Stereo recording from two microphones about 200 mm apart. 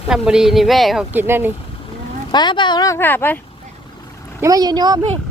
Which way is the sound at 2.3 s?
20° left (ahead or behind).